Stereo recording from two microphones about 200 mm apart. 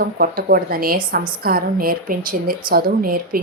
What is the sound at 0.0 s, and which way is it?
Speech, 50° right (ahead or behind).